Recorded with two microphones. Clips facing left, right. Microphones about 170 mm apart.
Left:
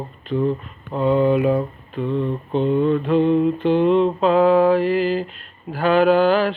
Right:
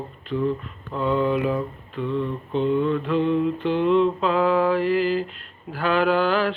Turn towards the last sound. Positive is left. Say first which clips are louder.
# left 5 dB
turn(degrees=20)  # may be behind; listen again after turning